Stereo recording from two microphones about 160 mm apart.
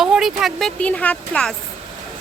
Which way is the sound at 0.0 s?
Centre (ahead or behind).